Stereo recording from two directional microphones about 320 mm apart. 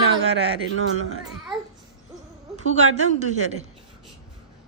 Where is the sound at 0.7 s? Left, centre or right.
Right.